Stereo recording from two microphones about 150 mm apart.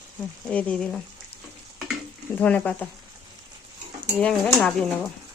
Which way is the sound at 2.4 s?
10° left (ahead or behind).